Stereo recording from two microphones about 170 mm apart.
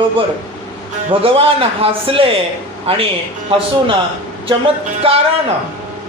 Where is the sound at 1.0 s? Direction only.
35° right (ahead or behind).